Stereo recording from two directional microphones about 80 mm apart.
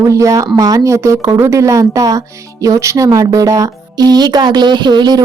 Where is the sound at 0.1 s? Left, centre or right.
Right.